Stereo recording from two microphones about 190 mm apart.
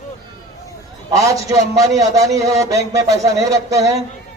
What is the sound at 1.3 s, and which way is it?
A man's voice, 20° right (ahead or behind).